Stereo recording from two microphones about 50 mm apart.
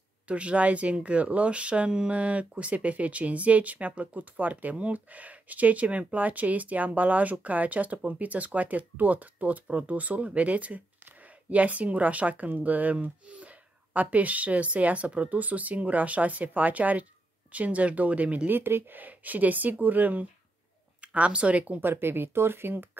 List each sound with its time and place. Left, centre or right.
0.3 s speech: right
18.5 s speech: right
18.9 s speech: right
21.0 s speech: right
21.7 s speech: right